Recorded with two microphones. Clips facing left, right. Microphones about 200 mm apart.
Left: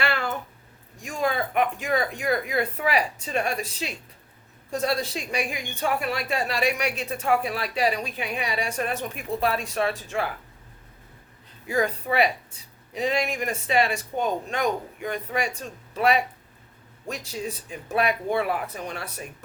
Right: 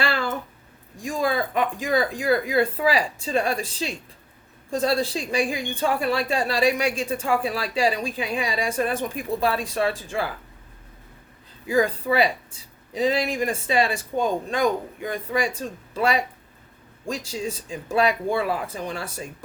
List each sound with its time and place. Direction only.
0.0 s a sound: 30° right (ahead or behind)
1.2 s speech: 30° right (ahead or behind)
11.7 s speech: 30° right (ahead or behind)